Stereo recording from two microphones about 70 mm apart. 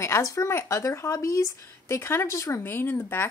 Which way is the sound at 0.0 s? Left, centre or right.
Left.